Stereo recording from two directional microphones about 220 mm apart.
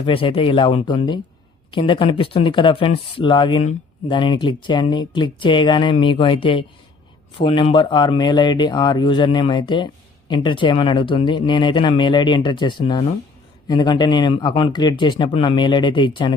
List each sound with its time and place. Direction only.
0.0 s speech: 25° left (ahead or behind)